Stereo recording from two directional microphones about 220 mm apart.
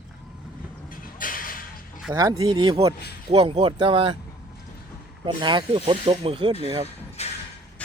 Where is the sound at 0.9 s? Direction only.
40° left (ahead or behind).